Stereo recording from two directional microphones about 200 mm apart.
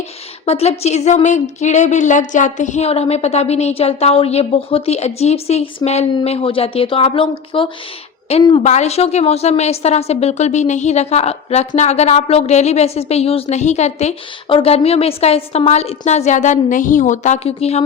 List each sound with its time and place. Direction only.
0.4 s speech: 30° left (ahead or behind)